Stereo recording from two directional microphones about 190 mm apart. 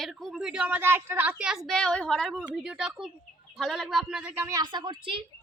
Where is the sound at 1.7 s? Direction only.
5° left (ahead or behind); by 5.3 s 25° right (ahead or behind).